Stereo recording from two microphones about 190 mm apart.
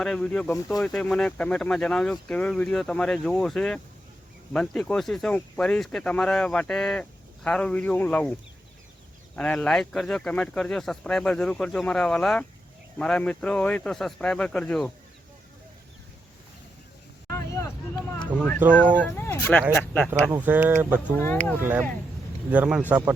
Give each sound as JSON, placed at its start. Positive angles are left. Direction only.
{"t": 0.0, "sound": "speech", "side_deg": 5}
{"t": 17.3, "sound": "vehicle", "side_deg": 15}
{"t": 18.6, "sound": "speech", "side_deg": -10}
{"t": 18.9, "sound": "speech", "side_deg": 10}
{"t": 20.3, "sound": "speech", "side_deg": -10}
{"t": 21.2, "sound": "speech", "side_deg": 10}
{"t": 21.6, "sound": "speech", "side_deg": -10}